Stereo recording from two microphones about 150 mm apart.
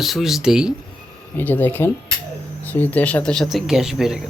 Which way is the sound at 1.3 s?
15° left (ahead or behind).